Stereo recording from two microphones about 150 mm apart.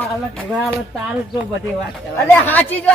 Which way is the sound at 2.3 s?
10° left (ahead or behind).